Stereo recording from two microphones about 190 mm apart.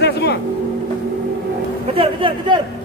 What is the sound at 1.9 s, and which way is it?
Speech, 25° right (ahead or behind).